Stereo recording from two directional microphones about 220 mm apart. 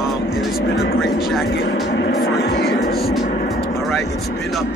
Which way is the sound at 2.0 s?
45° left (ahead or behind).